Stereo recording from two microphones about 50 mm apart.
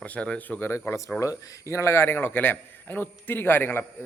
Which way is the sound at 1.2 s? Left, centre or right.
Left.